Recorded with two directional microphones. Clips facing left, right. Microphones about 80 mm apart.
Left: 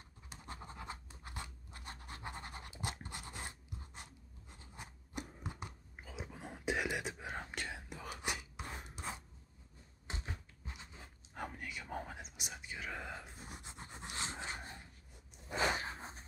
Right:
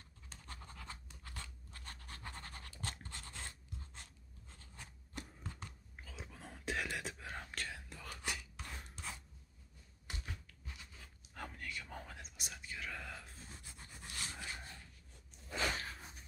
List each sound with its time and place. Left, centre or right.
0.3 s scratch: left
7.5 s whispering: centre
10.0 s cupboard open or close: left
11.3 s whispering: centre
13.5 s dog: left
15.4 s a sound: left